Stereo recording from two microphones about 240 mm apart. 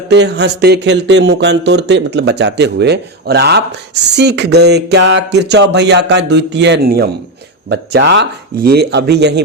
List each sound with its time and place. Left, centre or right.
0.1 s speech: right